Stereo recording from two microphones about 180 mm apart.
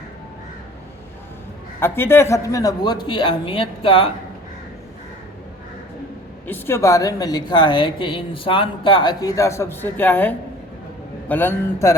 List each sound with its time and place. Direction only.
1.8 s a woman's voice: 10° left (ahead or behind); by 4.1 s 30° left (ahead or behind)
6.5 s a woman's voice: 15° left (ahead or behind)